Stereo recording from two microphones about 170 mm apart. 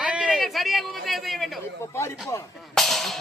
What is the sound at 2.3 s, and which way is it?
Speech, 20° left (ahead or behind).